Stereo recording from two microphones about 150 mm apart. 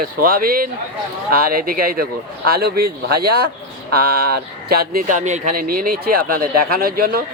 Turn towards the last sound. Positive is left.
turn(degrees=-85)